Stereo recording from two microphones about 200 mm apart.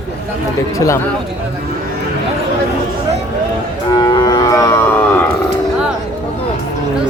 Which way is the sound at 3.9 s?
20° left (ahead or behind).